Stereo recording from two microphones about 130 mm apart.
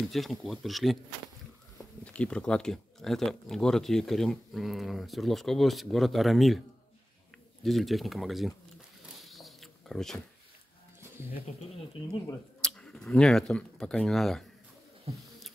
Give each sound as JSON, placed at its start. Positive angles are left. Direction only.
{"t": 0.0, "sound": "speech", "side_deg": 0}
{"t": 2.0, "sound": "speech", "side_deg": 10}
{"t": 7.6, "sound": "speech", "side_deg": 0}
{"t": 9.2, "sound": "a sound", "side_deg": 0}
{"t": 11.5, "sound": "speech", "side_deg": 60}
{"t": 12.6, "sound": "speech", "side_deg": 5}
{"t": 15.1, "sound": "a sound", "side_deg": -50}